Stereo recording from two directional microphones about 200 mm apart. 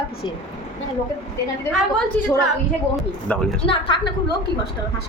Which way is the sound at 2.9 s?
5° left (ahead or behind).